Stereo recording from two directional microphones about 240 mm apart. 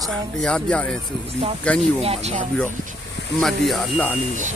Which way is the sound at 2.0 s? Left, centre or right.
Right.